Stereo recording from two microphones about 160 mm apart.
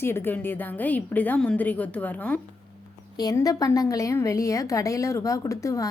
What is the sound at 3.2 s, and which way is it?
A woman's voice, 20° left (ahead or behind).